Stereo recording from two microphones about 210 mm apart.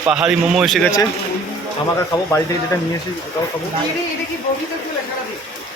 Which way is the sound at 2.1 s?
15° left (ahead or behind).